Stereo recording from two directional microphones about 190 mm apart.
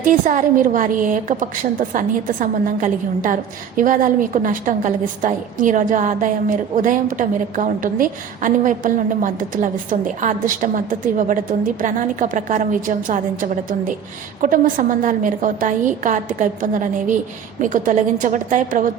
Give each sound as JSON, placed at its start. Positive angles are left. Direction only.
{"t": 0.0, "sound": "a woman's voice", "side_deg": -45}